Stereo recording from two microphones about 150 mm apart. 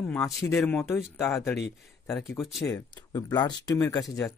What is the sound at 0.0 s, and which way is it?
Speech, 10° left (ahead or behind).